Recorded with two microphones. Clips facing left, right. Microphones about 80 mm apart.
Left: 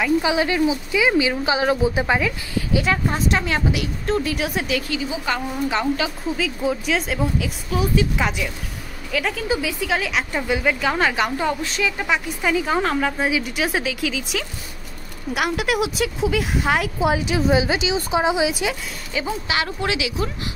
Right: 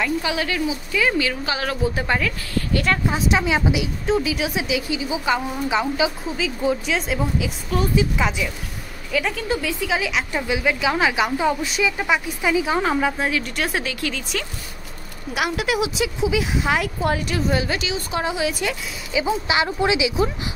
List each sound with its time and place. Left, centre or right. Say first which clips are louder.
0.2 s speech: left 4 dB; left
3.1 s a woman's voice: right 1 dB; centre
6.2 s a woman's voice: even; centre
13.3 s a woman's voice: left 2 dB; centre
17.1 s speech: left 4 dB; centre
19.1 s speech: right 3 dB; centre